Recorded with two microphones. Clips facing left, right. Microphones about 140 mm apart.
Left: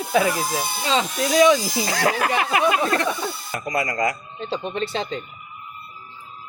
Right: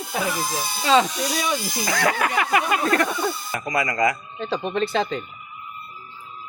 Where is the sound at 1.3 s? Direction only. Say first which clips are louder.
Left 13 dB; 90° left.